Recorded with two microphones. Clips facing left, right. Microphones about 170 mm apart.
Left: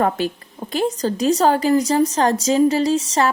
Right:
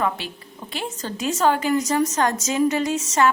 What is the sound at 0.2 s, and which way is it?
A woman's voice, 45° left (ahead or behind).